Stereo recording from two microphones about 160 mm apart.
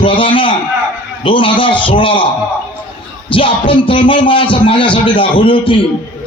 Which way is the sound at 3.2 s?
35° left (ahead or behind).